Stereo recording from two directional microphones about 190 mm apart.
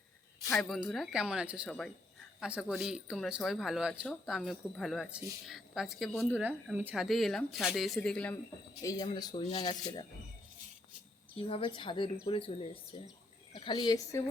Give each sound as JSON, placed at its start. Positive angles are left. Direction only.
{"t": 0.5, "sound": "speech", "side_deg": 0}
{"t": 8.8, "sound": "speech", "side_deg": 20}
{"t": 11.3, "sound": "speech", "side_deg": 30}